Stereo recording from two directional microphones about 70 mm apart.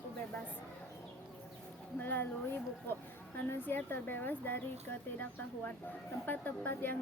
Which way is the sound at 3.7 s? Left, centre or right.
Left.